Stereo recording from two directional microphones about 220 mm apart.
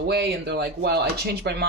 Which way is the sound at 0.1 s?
50° right (ahead or behind).